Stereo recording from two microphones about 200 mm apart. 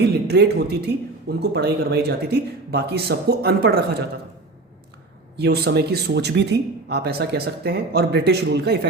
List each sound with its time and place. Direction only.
0.1 s speech: 55° right (ahead or behind)
5.4 s speech: 55° right (ahead or behind)